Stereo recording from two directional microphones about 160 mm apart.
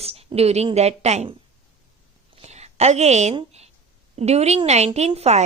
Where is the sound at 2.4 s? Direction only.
45° right (ahead or behind).